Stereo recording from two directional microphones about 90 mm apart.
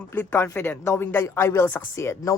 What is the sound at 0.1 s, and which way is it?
Speech, 25° left (ahead or behind).